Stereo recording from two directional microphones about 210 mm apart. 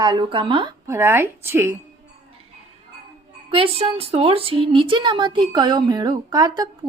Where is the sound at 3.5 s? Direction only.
25° right (ahead or behind).